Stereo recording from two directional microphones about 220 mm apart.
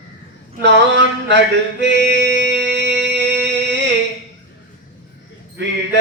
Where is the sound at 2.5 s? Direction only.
50° right (ahead or behind).